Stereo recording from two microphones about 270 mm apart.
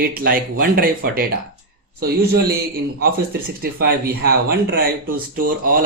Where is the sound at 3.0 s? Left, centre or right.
Right.